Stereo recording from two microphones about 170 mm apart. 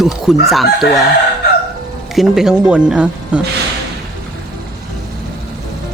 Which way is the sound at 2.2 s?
5° right (ahead or behind).